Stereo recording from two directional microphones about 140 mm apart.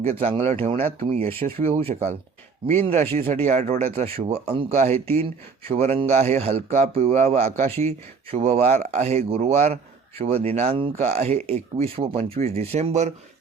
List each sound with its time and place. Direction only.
0.0 s a man's voice: 50° right (ahead or behind)
10.9 s a man's voice: 55° right (ahead or behind)